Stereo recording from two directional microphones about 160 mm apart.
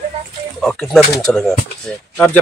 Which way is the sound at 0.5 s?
5° left (ahead or behind).